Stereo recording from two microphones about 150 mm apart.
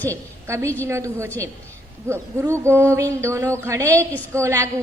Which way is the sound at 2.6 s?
15° right (ahead or behind).